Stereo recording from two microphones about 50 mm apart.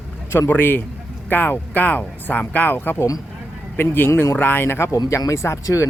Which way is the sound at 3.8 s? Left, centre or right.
Left.